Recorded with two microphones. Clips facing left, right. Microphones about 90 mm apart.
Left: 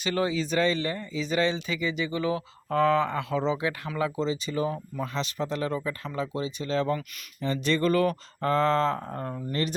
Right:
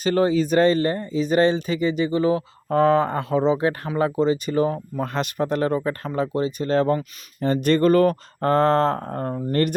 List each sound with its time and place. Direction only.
0.0 s speech: 40° right (ahead or behind)